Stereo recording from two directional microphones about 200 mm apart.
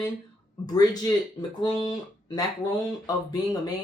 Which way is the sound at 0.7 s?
20° left (ahead or behind).